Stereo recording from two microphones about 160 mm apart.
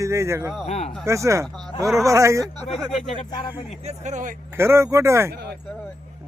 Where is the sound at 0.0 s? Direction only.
20° right (ahead or behind).